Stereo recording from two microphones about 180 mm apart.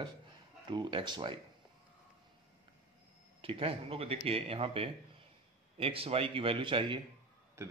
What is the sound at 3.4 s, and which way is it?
Speech, 30° right (ahead or behind).